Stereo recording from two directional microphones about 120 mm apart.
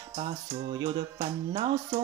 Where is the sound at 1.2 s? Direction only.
55° right (ahead or behind).